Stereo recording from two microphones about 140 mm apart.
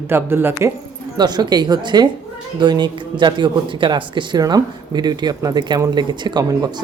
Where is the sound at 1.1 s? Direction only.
30° right (ahead or behind).